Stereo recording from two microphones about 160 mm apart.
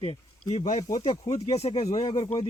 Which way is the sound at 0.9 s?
25° left (ahead or behind).